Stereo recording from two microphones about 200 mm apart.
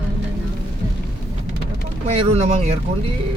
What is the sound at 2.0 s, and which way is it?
Speech, 30° right (ahead or behind).